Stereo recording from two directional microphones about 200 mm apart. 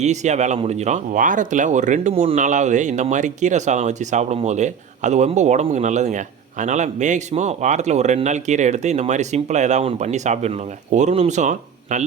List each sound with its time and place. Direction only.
0.0 s speech: 35° right (ahead or behind)